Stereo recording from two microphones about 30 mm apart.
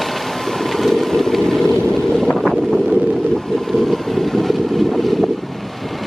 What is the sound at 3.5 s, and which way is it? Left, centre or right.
Vehicle, centre.